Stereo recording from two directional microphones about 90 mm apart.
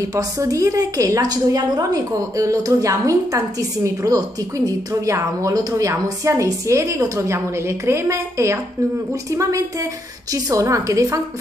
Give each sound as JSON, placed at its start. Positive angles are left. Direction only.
{"t": 0.0, "sound": "a woman's voice", "side_deg": -35}